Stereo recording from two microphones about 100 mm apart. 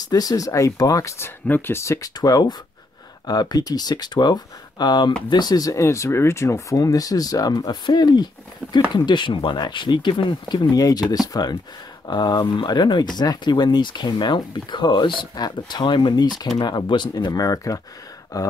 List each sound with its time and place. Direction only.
0.1 s speech: 40° left (ahead or behind)
2.1 s speech: 40° left (ahead or behind)
17.3 s speech: 35° left (ahead or behind)
18.3 s a sound: 40° left (ahead or behind)